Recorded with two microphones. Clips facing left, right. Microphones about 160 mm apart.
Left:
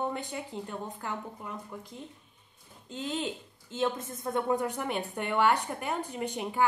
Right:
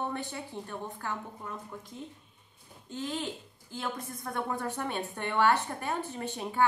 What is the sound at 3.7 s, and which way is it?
A woman's voice, 20° left (ahead or behind).